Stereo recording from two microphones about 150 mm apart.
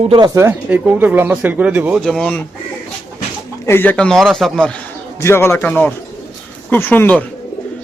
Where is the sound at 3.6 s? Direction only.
15° left (ahead or behind).